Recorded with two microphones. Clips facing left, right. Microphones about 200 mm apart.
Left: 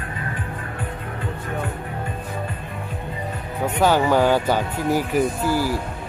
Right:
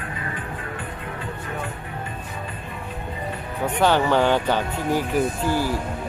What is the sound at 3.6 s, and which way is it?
Speech, 10° left (ahead or behind).